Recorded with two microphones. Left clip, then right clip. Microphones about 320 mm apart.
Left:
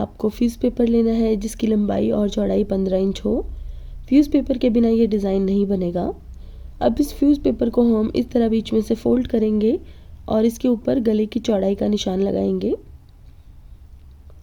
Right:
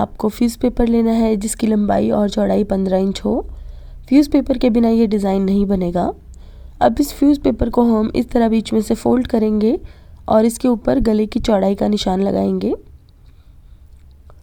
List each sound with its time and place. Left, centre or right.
0.0 s speech: right